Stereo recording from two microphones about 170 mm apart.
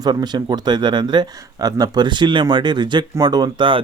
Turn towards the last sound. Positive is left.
turn(degrees=-30)  # may be behind; listen again after turning